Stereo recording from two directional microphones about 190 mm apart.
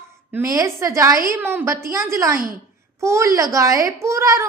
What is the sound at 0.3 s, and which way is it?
A child's voice, 15° right (ahead or behind).